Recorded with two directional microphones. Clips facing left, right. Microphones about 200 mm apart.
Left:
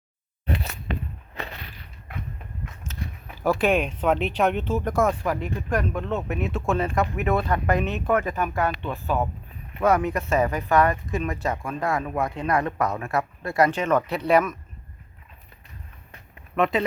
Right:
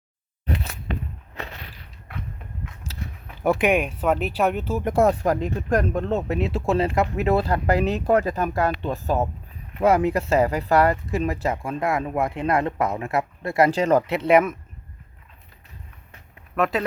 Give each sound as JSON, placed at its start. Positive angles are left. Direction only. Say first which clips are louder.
{"t": 2.8, "sound": "a sound", "louder": "even", "side_deg": -35}
{"t": 3.4, "sound": "speech", "louder": "right 1 dB", "side_deg": -20}
{"t": 4.9, "sound": "speech", "louder": "right 6 dB", "side_deg": -35}
{"t": 9.8, "sound": "speech", "louder": "right 3 dB", "side_deg": -30}
{"t": 16.6, "sound": "speech", "louder": "even", "side_deg": 0}